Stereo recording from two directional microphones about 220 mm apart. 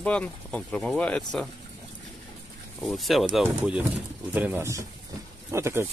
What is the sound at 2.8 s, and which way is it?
Speech, centre (ahead or behind).